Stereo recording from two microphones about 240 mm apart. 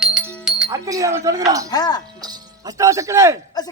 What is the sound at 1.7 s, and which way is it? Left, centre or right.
Speech, centre.